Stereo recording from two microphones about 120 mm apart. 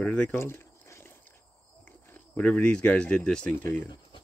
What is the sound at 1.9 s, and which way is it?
Speech, 15° left (ahead or behind).